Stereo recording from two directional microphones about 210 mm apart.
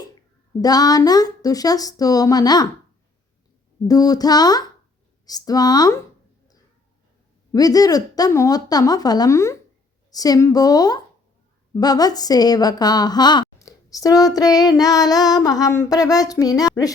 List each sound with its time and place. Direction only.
0.6 s a woman's voice: 20° left (ahead or behind)
3.8 s a woman's voice: 20° left (ahead or behind)
7.5 s a woman's voice: 15° left (ahead or behind)